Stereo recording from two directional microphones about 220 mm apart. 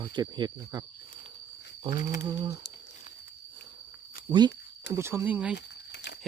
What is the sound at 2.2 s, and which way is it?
Speech, 20° right (ahead or behind).